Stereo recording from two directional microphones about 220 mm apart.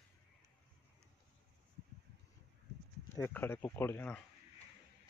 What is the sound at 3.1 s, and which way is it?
Speech, 10° left (ahead or behind).